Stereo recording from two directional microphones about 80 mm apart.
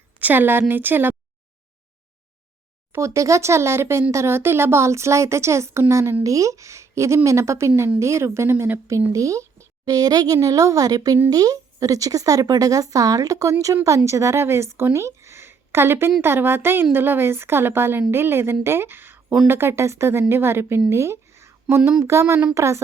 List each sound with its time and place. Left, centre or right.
0.2 s a woman's voice: right
3.0 s a woman's voice: right
8.9 s speech: right
9.9 s a woman's voice: right
20.9 s a sound: right
22.0 s a woman's voice: right